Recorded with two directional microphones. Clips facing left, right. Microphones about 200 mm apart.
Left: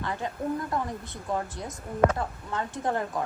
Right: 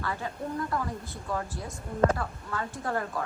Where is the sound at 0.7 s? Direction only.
20° left (ahead or behind).